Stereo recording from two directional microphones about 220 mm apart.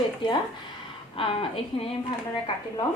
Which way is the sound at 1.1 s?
25° left (ahead or behind).